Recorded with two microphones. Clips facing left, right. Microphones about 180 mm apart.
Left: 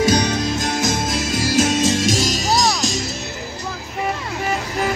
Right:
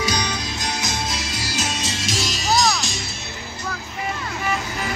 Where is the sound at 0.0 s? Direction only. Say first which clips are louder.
Left 8 dB; 50° left (ahead or behind).